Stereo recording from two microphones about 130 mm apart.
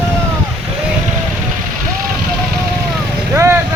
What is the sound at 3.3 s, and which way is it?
Vehicle, 20° right (ahead or behind).